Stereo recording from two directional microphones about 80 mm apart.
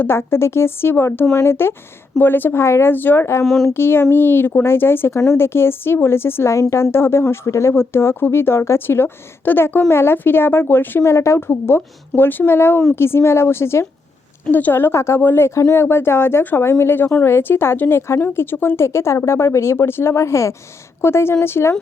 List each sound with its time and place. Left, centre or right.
0.0 s a woman's voice: left
3.4 s speech: centre
3.7 s a woman's voice: left